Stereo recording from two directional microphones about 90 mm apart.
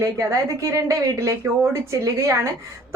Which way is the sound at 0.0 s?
35° right (ahead or behind).